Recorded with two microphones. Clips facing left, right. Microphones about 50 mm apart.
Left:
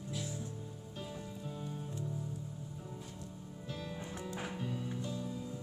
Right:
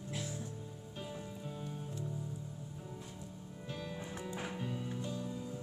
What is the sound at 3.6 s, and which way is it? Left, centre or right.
Music, centre.